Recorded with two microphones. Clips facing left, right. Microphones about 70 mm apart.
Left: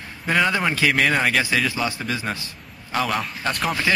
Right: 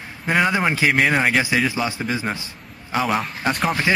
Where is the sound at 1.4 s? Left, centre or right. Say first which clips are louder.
Right 2 dB; centre.